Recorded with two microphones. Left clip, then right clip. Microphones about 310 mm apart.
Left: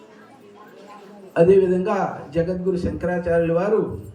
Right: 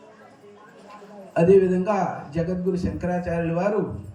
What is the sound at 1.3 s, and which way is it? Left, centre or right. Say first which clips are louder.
A man's voice: left 2 dB; centre.